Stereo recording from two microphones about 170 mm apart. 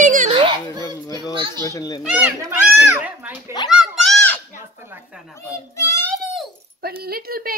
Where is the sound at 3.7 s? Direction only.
Centre (ahead or behind).